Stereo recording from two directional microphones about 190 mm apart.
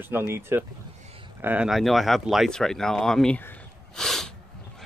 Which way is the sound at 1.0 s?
30° right (ahead or behind).